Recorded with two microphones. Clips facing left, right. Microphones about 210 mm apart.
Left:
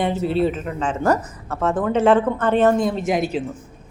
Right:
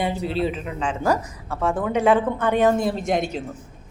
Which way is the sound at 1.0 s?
10° right (ahead or behind).